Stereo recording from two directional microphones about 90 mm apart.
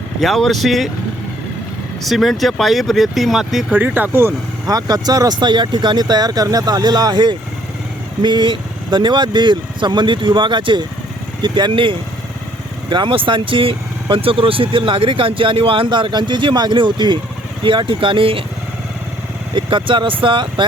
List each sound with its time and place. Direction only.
0.2 s speech: centre (ahead or behind)
2.0 s speech: centre (ahead or behind)
3.8 s speech: 20° right (ahead or behind)
4.7 s speech: 45° right (ahead or behind); by 18.4 s 85° right
19.5 s speech: 65° right (ahead or behind)